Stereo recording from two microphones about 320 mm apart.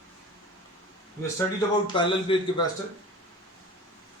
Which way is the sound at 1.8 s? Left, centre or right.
Centre.